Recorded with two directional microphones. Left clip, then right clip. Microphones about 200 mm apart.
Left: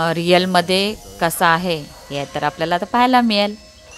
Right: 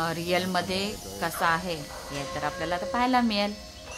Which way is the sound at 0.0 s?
40° left (ahead or behind).